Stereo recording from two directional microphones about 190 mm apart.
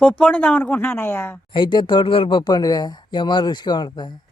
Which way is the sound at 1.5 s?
25° left (ahead or behind).